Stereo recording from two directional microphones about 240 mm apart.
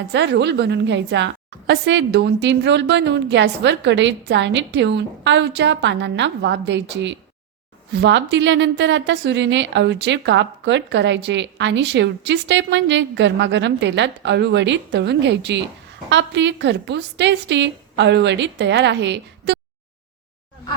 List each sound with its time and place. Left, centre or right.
0.1 s a woman's voice: right